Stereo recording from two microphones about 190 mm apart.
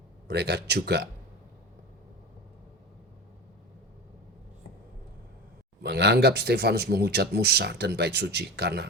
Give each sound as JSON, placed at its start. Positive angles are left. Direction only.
{"t": 0.3, "sound": "speech", "side_deg": -60}
{"t": 5.8, "sound": "speech", "side_deg": -60}